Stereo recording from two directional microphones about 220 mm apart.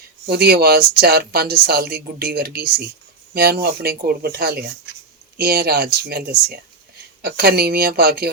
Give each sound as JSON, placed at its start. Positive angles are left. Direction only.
{"t": 0.3, "sound": "speech", "side_deg": -45}